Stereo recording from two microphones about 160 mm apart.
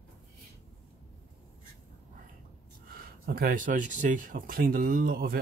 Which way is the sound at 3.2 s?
65° right (ahead or behind).